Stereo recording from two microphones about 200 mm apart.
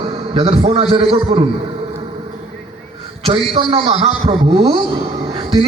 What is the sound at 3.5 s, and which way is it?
A man's voice, 25° right (ahead or behind).